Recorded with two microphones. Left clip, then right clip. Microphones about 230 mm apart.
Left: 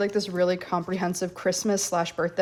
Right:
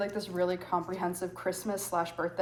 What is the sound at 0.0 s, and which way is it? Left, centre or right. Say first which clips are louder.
Speech: left 7 dB; left.